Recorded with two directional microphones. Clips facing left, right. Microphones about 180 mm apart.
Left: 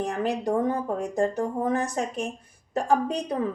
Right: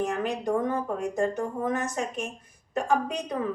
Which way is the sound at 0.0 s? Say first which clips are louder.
Left 1 dB; 35° left (ahead or behind).